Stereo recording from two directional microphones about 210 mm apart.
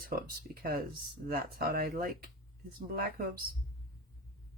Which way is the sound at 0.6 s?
45° right (ahead or behind).